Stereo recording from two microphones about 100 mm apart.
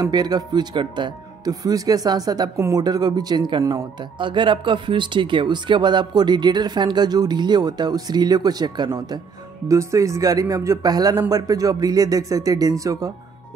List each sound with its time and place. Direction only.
0.0 s speech: 40° right (ahead or behind)
1.5 s speech: 35° right (ahead or behind)
9.7 s speech: 30° right (ahead or behind)